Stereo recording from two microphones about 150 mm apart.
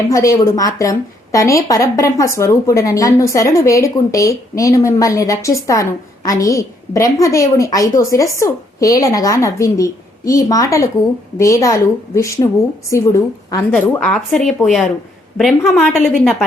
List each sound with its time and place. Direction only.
0.1 s a woman's voice: 20° left (ahead or behind)
13.7 s a woman's voice: 5° left (ahead or behind)